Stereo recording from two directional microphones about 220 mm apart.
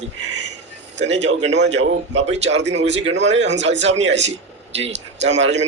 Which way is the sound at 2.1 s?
30° right (ahead or behind).